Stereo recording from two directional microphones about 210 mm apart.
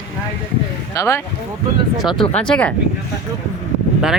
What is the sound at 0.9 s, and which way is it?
Speech, 15° left (ahead or behind).